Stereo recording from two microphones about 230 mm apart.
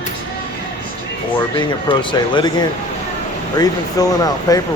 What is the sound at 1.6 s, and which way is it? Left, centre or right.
Speech, centre.